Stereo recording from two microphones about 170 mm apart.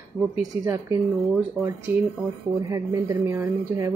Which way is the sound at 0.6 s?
20° right (ahead or behind).